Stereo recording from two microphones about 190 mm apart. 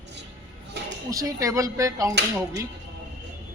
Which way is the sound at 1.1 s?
20° right (ahead or behind).